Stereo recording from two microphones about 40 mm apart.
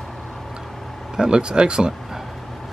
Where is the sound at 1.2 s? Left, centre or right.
Right.